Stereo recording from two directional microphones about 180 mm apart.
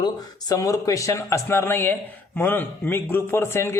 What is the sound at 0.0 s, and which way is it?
A man's voice, 20° left (ahead or behind).